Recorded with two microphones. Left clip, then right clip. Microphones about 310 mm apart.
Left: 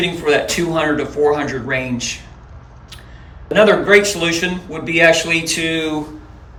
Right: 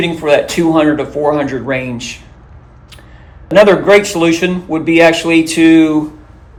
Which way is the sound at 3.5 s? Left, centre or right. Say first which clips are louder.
Right 4 dB; centre.